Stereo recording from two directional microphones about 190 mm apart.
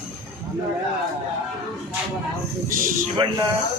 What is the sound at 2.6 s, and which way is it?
Speech, 45° right (ahead or behind).